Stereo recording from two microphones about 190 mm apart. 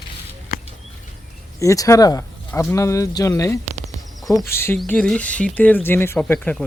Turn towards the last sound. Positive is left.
turn(degrees=10)  # may be behind; listen again after turning